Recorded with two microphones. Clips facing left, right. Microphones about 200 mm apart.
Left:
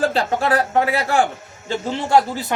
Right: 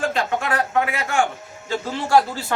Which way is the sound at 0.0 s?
35° left (ahead or behind).